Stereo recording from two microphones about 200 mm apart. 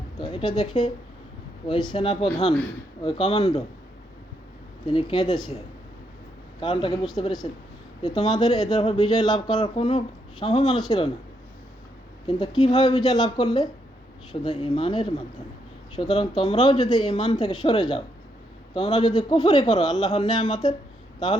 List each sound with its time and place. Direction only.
0.2 s a man's voice: 25° left (ahead or behind)
4.9 s a man's voice: 25° left (ahead or behind)
6.6 s a man's voice: 25° left (ahead or behind)
12.3 s a man's voice: 25° left (ahead or behind)